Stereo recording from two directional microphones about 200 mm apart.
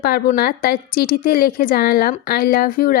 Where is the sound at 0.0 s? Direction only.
50° left (ahead or behind).